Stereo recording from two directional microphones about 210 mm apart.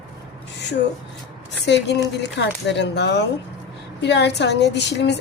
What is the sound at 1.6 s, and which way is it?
A woman's voice, 55° left (ahead or behind).